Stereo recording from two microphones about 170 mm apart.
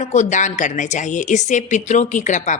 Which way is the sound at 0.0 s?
45° left (ahead or behind).